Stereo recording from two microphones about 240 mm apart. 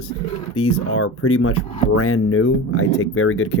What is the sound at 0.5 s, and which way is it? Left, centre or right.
Speech, left.